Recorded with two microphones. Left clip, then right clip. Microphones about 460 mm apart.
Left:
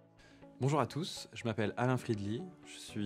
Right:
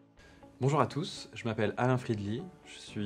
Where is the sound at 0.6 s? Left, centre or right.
Left.